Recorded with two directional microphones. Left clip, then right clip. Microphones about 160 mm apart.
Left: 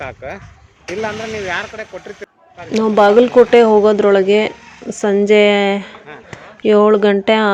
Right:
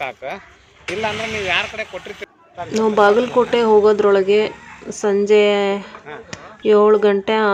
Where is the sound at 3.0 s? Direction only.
20° left (ahead or behind).